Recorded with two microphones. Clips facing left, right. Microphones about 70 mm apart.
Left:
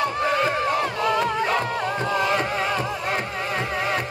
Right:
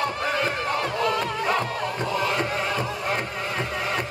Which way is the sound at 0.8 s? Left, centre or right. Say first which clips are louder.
Left 2 dB; centre.